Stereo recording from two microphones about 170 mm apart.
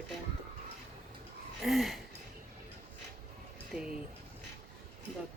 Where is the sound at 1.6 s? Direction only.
Centre (ahead or behind).